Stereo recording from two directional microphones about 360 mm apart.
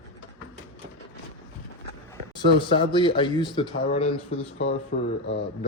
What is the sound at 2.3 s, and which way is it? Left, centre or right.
Speech, centre.